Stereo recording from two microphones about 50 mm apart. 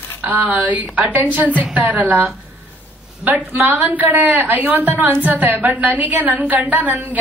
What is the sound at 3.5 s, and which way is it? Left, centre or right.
A woman's voice, right.